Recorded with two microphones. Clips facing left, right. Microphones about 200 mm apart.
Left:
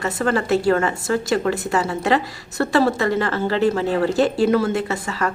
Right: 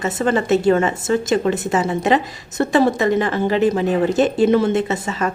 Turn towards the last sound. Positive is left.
turn(degrees=-20)  # may be behind; listen again after turning